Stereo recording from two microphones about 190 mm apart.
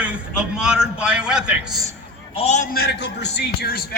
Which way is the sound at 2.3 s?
35° left (ahead or behind).